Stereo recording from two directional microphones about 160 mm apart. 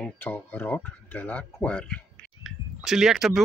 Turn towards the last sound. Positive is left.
turn(degrees=0)  # may be behind; listen again after turning